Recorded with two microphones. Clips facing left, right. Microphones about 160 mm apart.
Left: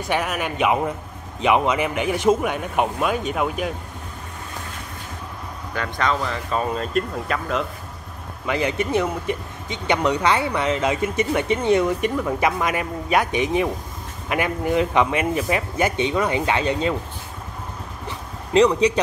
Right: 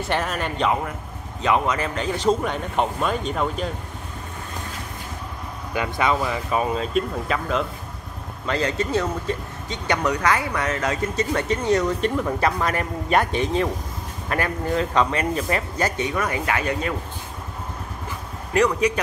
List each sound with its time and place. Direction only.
0.0 s speech: 5° left (ahead or behind)
5.8 s speech: 10° right (ahead or behind)
8.5 s speech: 15° left (ahead or behind)
16.0 s speech: 20° left (ahead or behind)
18.5 s speech: 25° left (ahead or behind)